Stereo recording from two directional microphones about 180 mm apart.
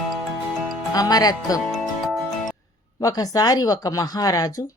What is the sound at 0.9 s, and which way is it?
Speech, 20° left (ahead or behind).